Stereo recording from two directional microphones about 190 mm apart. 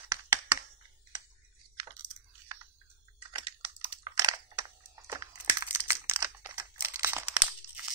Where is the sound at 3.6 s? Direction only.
20° right (ahead or behind).